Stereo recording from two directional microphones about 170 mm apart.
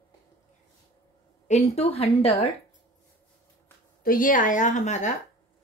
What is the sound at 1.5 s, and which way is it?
A woman's voice, 40° left (ahead or behind).